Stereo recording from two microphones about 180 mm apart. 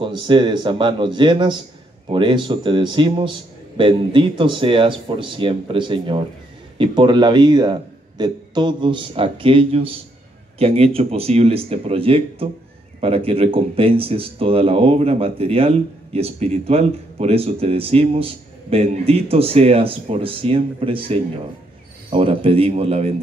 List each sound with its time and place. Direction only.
0.0 s a man's voice: 25° right (ahead or behind)